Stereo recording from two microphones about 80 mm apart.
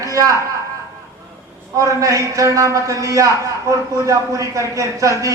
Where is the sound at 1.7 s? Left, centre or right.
Right.